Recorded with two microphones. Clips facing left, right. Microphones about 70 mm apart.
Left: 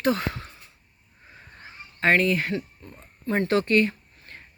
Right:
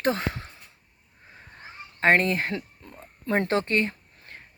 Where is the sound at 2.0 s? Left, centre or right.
Right.